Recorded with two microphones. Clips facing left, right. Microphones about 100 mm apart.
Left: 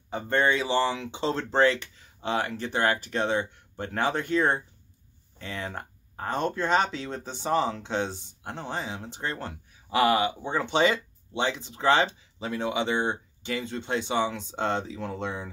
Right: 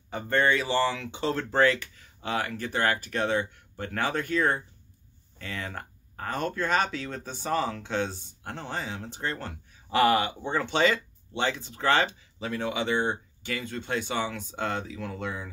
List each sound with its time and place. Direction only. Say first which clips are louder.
0.1 s speech: even; 20° left (ahead or behind)